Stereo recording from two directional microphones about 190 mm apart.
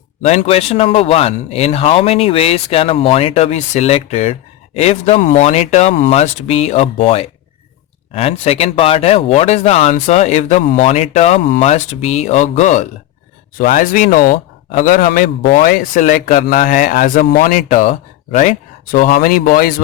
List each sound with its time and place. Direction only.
0.2 s a man's voice: 35° left (ahead or behind)